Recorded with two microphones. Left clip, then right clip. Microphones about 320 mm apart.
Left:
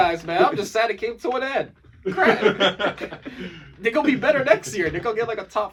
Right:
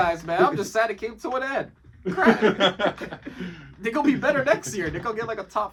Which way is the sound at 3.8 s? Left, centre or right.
Centre.